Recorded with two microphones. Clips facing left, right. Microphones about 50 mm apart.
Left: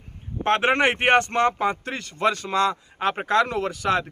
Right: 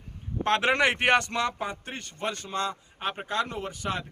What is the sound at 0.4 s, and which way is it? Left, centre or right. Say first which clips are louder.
A man's voice: left 4 dB; left.